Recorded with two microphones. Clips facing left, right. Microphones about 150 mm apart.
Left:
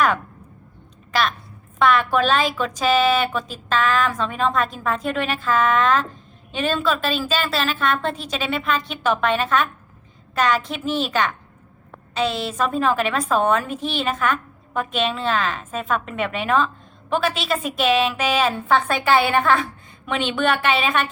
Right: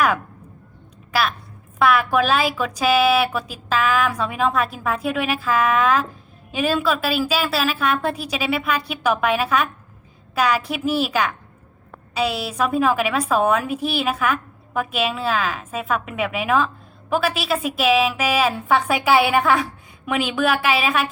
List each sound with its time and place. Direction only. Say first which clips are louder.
1.1 s a woman's voice: even; 5° right (ahead or behind)